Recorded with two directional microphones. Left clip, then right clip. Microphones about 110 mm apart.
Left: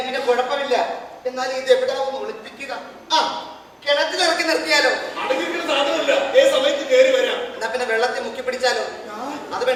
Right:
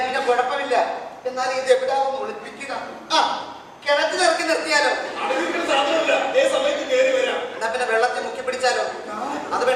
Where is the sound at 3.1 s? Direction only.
45° right (ahead or behind).